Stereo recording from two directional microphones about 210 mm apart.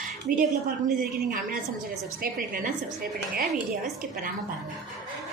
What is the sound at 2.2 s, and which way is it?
Speech, 40° right (ahead or behind).